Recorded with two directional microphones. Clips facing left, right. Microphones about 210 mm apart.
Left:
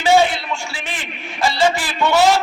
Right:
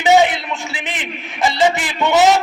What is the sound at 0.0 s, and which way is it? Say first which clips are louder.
A man's voice: right 2 dB; 20° right (ahead or behind).